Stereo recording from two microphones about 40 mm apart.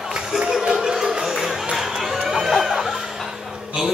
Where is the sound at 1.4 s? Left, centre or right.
Centre.